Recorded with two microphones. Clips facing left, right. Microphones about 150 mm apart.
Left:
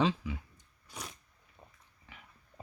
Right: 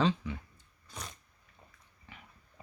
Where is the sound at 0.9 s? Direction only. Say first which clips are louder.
Even; 5° left (ahead or behind).